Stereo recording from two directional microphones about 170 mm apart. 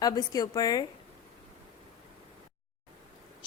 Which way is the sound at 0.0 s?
20° left (ahead or behind).